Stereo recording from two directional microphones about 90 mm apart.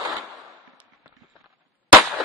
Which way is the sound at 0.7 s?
15° right (ahead or behind).